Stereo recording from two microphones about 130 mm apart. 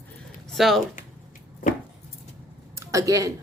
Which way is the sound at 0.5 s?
Centre (ahead or behind).